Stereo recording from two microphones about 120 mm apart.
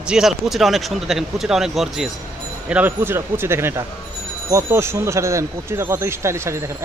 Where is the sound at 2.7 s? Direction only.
15° right (ahead or behind).